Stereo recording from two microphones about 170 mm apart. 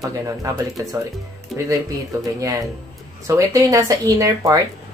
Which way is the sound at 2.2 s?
20° right (ahead or behind).